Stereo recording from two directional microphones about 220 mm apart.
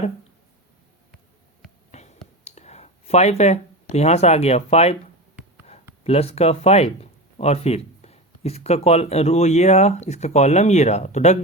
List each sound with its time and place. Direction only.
1.9 s whispering: 30° left (ahead or behind)
6.1 s speech: 25° left (ahead or behind)